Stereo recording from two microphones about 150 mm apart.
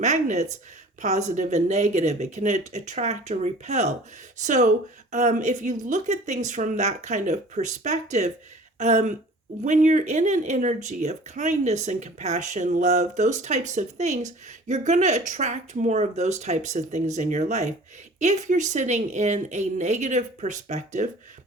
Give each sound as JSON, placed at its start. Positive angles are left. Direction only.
{"t": 0.0, "sound": "speech", "side_deg": -50}